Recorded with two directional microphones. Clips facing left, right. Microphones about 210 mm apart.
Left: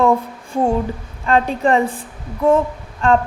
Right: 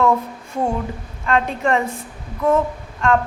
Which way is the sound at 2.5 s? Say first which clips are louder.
Left 3 dB; 30° left (ahead or behind).